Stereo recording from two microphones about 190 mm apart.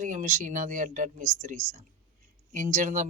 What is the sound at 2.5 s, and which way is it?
Speech, 45° right (ahead or behind).